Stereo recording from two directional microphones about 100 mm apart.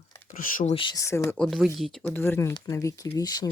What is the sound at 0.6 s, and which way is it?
Speech, 75° left (ahead or behind).